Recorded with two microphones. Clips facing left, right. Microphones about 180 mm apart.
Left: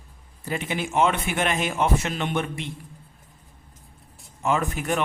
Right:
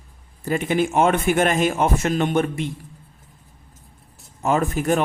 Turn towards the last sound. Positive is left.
turn(degrees=-40)  # may be behind; listen again after turning